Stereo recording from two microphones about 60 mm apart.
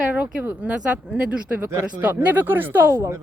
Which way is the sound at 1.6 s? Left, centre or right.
Right.